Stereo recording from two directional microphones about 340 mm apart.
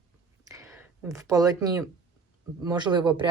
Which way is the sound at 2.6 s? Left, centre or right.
Centre.